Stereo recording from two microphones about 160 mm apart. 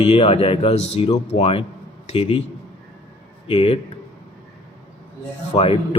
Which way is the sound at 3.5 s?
35° left (ahead or behind).